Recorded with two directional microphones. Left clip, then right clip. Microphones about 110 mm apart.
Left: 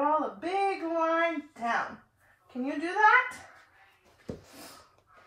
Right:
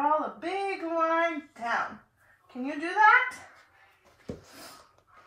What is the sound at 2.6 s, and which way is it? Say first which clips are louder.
Speech: right 2 dB; 15° left (ahead or behind).